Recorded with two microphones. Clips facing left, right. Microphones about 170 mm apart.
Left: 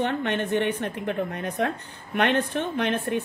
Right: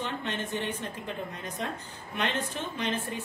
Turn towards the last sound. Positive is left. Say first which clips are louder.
# left 7 dB
turn(degrees=60)  # may be behind; listen again after turning